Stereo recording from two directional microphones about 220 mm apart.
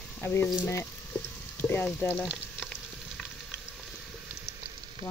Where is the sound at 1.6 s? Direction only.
10° left (ahead or behind).